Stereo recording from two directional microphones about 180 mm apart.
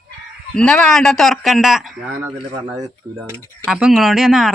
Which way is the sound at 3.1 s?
15° right (ahead or behind).